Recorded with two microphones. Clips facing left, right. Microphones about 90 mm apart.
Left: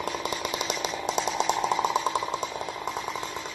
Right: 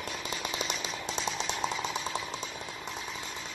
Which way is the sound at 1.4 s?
45° left (ahead or behind).